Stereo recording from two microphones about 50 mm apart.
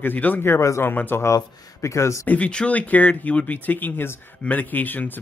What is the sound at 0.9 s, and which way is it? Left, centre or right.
Speech, left.